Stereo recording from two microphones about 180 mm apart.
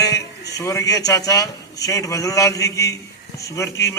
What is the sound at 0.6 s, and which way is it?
A man's voice, 15° left (ahead or behind).